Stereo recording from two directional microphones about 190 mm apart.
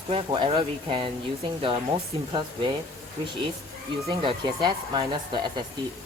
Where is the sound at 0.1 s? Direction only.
25° right (ahead or behind).